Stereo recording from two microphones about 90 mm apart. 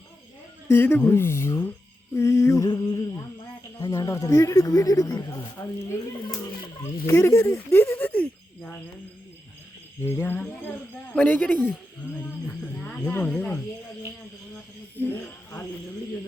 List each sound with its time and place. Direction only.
0.7 s speech: 25° left (ahead or behind); by 5.4 s 45° left (ahead or behind)
5.6 s speech: 30° left (ahead or behind)
6.8 s speech: 35° left (ahead or behind)
7.8 s a sound: 20° left (ahead or behind)
10.0 s speech: 25° left (ahead or behind)
11.1 s speech: 15° left (ahead or behind)
14.5 s a sound: 20° left (ahead or behind)